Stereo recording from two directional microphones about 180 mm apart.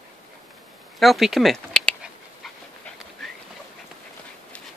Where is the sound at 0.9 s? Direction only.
Centre (ahead or behind).